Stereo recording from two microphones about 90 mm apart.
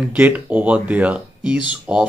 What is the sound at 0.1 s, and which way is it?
Speech, 20° right (ahead or behind).